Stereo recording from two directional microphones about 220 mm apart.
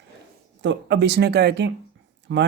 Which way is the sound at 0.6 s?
55° right (ahead or behind).